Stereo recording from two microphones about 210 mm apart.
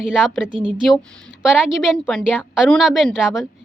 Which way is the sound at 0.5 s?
25° right (ahead or behind).